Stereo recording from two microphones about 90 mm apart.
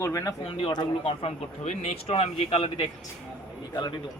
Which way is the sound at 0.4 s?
80° left.